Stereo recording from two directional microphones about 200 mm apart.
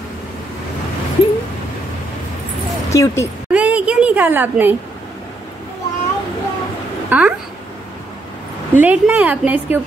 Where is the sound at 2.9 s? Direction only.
15° left (ahead or behind).